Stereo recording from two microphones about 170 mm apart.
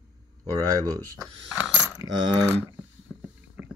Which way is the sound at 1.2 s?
Centre (ahead or behind).